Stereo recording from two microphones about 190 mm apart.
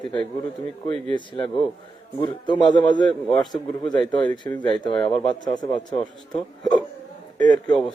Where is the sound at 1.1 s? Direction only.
25° left (ahead or behind).